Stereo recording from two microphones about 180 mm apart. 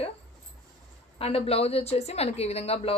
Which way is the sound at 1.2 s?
30° left (ahead or behind).